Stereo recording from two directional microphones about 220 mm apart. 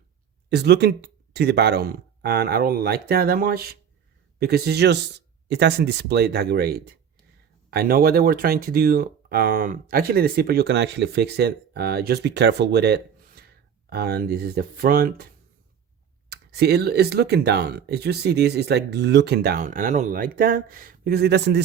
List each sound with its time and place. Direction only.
0.5 s speech: 50° right (ahead or behind)
16.3 s speech: 45° right (ahead or behind)